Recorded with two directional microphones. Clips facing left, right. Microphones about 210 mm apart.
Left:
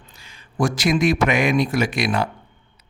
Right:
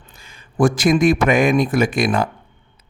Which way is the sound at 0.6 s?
50° right (ahead or behind).